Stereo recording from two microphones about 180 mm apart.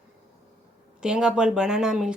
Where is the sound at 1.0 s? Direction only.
5° right (ahead or behind).